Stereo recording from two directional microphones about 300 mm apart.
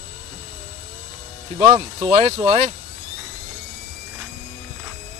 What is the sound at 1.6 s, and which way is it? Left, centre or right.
Speech, centre.